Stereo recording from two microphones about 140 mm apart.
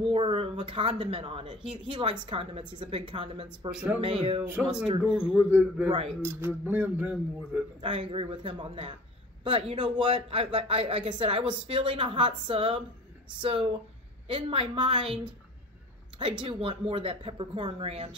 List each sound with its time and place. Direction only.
0.0 s speech: 40° right (ahead or behind)
3.7 s a man's voice: 10° right (ahead or behind)
7.8 s speech: 40° right (ahead or behind)
10.1 s speech: 45° right (ahead or behind)